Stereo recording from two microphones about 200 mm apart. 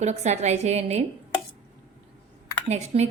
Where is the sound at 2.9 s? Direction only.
30° right (ahead or behind).